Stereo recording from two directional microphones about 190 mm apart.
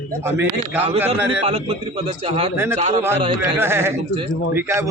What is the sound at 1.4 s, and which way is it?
A man's voice, 35° right (ahead or behind).